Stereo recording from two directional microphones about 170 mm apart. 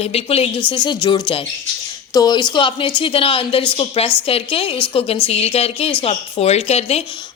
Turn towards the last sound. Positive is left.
turn(degrees=40)  # may be behind; listen again after turning